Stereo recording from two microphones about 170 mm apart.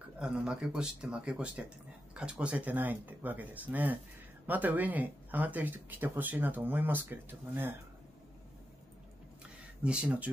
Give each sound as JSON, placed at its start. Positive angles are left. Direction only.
{"t": 0.2, "sound": "speech", "side_deg": -5}
{"t": 9.8, "sound": "speech", "side_deg": -5}